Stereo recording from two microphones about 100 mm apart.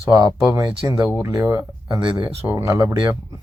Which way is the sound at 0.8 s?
30° right (ahead or behind).